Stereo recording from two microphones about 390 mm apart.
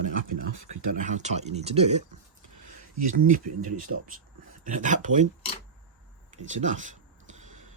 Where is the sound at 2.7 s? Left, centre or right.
Right.